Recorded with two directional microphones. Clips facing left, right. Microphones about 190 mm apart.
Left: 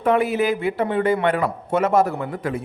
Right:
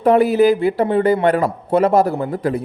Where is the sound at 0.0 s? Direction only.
35° right (ahead or behind).